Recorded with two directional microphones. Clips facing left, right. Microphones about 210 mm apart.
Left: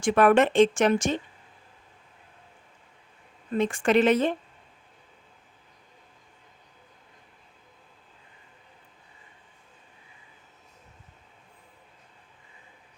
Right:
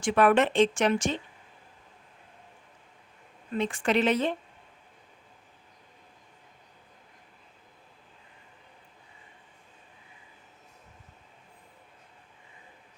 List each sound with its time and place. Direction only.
0.0 s speech: 45° left (ahead or behind)
3.5 s speech: 45° left (ahead or behind)